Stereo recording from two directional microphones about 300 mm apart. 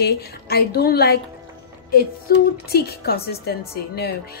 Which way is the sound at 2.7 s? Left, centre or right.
Left.